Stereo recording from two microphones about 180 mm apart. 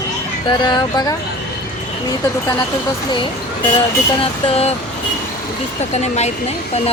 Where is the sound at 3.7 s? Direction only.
30° left (ahead or behind).